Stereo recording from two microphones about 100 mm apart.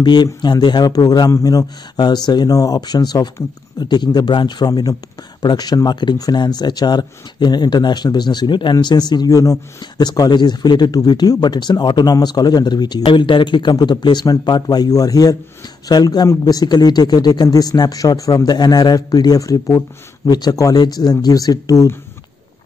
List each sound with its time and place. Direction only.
0.0 s speech: 45° left (ahead or behind)